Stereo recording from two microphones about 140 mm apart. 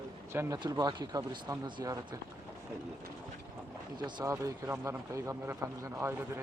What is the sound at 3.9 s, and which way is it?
Speech, 30° right (ahead or behind).